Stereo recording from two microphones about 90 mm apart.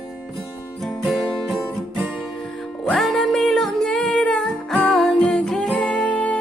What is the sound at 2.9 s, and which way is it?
Music, 5° left (ahead or behind).